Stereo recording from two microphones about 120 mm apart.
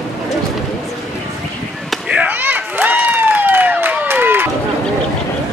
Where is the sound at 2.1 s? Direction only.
15° right (ahead or behind).